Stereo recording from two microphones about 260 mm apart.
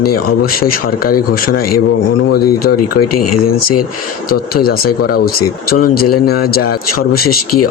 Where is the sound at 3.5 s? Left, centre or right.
Left.